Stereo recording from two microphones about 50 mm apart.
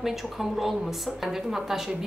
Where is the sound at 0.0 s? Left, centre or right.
Centre.